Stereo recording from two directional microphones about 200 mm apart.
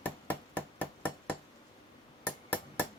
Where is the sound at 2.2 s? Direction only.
10° left (ahead or behind).